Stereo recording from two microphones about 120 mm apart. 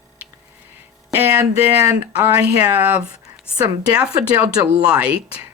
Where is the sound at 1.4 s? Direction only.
25° right (ahead or behind).